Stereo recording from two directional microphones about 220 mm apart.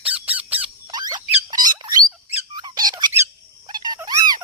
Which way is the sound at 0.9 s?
20° right (ahead or behind).